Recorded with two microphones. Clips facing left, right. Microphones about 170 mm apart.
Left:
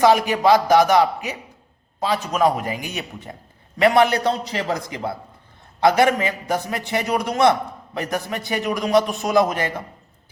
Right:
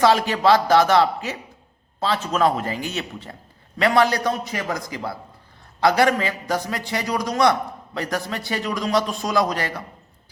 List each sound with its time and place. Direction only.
0.0 s a man's voice: 15° left (ahead or behind)